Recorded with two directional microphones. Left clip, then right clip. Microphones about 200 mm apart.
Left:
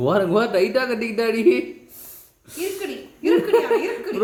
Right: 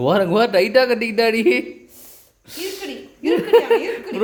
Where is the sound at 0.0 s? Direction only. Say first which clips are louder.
Right 3 dB; 30° right (ahead or behind).